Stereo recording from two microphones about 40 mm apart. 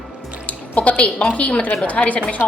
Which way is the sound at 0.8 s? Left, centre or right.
Left.